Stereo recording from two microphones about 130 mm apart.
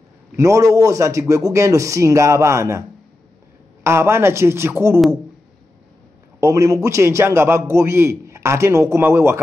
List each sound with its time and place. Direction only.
0.4 s a man's voice: 25° right (ahead or behind)
3.8 s a man's voice: 20° right (ahead or behind)
6.4 s a man's voice: 25° right (ahead or behind)